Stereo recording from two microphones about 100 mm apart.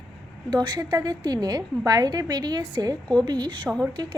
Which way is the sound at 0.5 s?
45° right (ahead or behind).